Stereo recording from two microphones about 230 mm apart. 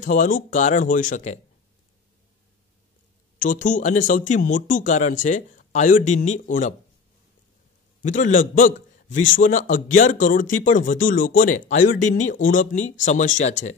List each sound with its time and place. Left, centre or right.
0.0 s speech: left
3.3 s speech: left
8.0 s speech: left